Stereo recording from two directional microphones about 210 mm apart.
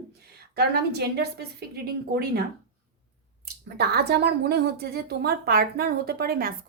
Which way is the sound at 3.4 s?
50° right (ahead or behind).